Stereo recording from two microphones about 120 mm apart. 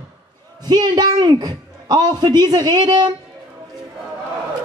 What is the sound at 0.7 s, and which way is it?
A woman's voice, 35° right (ahead or behind).